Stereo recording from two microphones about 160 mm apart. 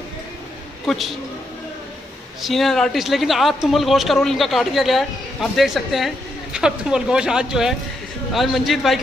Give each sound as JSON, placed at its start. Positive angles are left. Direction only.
{"t": 0.8, "sound": "a man's voice", "side_deg": 0}
{"t": 2.4, "sound": "a man's voice", "side_deg": 0}